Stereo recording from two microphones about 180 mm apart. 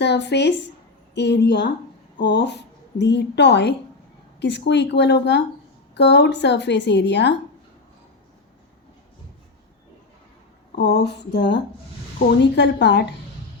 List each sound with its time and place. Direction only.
0.0 s a woman's voice: 70° left (ahead or behind)
10.8 s speech: 70° left (ahead or behind)